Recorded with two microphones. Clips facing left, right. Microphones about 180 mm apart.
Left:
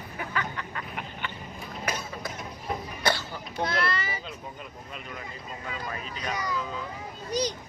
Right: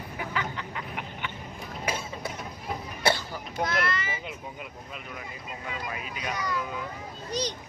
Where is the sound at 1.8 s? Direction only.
30° right (ahead or behind).